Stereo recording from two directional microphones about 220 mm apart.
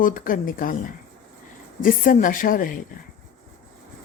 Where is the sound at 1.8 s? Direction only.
40° left (ahead or behind).